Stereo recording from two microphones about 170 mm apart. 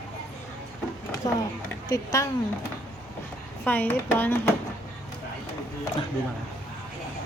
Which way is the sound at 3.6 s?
10° left (ahead or behind).